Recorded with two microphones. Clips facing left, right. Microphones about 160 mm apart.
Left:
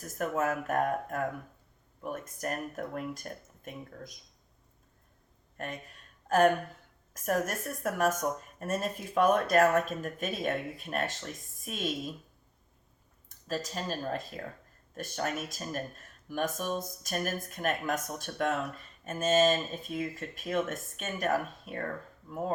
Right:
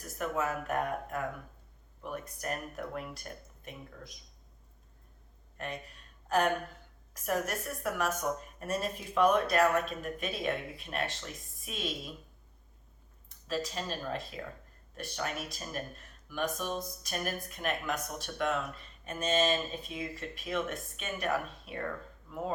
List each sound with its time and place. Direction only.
0.2 s speech: 45° left (ahead or behind)
5.5 s a woman's voice: 45° left (ahead or behind)
13.2 s speech: 45° left (ahead or behind)